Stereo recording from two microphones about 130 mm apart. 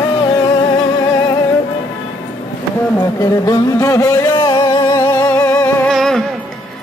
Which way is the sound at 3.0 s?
25° left (ahead or behind).